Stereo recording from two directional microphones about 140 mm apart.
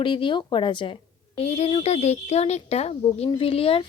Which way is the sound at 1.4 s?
45° left (ahead or behind).